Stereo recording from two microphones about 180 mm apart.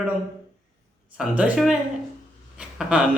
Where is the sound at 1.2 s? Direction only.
5° right (ahead or behind).